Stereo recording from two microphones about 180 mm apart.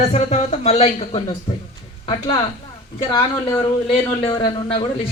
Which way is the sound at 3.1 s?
20° left (ahead or behind).